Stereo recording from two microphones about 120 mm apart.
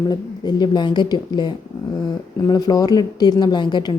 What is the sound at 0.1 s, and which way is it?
Speech, 35° left (ahead or behind).